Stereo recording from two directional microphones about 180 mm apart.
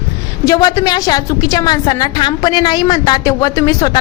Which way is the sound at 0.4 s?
20° left (ahead or behind).